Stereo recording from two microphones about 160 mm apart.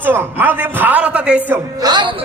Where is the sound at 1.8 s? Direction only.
30° right (ahead or behind).